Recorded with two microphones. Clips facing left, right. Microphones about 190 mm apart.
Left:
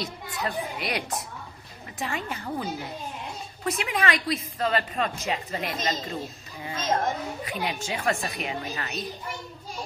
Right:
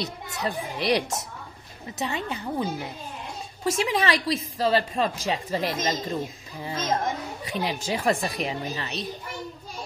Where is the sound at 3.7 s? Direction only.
30° right (ahead or behind).